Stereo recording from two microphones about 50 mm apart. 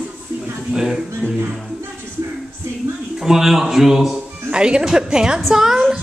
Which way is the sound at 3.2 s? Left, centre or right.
Centre.